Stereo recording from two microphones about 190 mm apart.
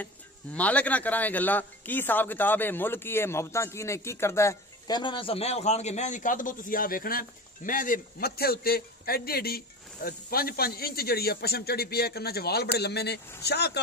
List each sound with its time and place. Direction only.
0.0 s speech: 10° left (ahead or behind); by 13.7 s 60° left (ahead or behind)